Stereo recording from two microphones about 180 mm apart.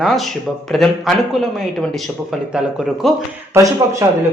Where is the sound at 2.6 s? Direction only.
5° right (ahead or behind).